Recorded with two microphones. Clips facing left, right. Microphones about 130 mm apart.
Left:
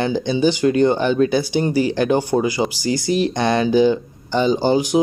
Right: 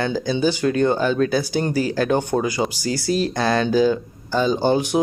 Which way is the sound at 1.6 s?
5° left (ahead or behind).